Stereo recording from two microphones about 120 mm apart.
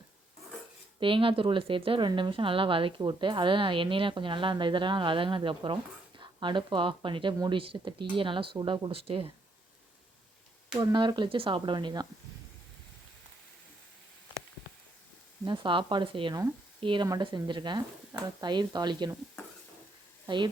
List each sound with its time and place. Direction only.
0.9 s a woman's voice: 45° right (ahead or behind)
10.8 s speech: 35° right (ahead or behind)
15.4 s speech: 40° right (ahead or behind)
20.2 s speech: 40° right (ahead or behind)